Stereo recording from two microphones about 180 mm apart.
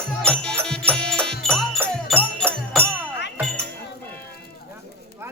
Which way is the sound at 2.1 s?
10° right (ahead or behind).